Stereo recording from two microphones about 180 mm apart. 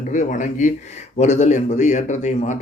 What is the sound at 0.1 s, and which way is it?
Speech, 45° left (ahead or behind).